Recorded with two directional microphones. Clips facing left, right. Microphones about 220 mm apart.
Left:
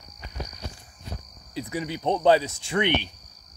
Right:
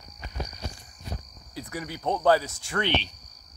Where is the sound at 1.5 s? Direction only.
25° left (ahead or behind).